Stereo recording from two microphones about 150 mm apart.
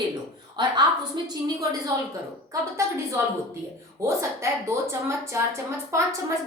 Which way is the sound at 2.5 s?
20° right (ahead or behind).